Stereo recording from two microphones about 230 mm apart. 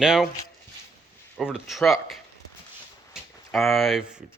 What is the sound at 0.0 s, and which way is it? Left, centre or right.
Speech, centre.